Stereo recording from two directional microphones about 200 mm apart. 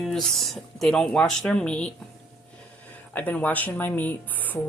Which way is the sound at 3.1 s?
10° left (ahead or behind).